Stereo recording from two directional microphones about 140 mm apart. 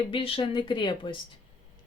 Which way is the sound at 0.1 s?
40° left (ahead or behind).